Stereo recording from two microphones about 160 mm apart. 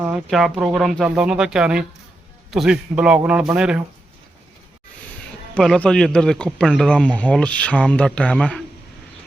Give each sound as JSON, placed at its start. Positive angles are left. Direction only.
{"t": 0.3, "sound": "a man's voice", "side_deg": 0}
{"t": 5.5, "sound": "speech", "side_deg": 5}